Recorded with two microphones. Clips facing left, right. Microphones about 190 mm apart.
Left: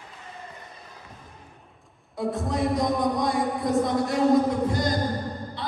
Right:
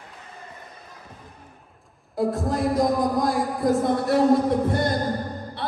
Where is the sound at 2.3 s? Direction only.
Centre (ahead or behind).